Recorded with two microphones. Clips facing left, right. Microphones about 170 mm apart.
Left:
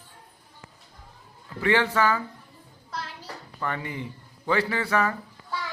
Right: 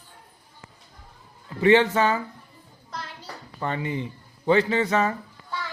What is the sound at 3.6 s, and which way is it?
A man's voice, 20° right (ahead or behind).